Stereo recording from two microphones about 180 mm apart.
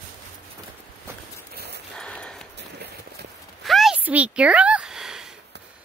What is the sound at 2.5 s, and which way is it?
Clip-clop, 65° right (ahead or behind).